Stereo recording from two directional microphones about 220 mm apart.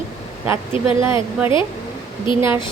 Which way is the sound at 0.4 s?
10° right (ahead or behind).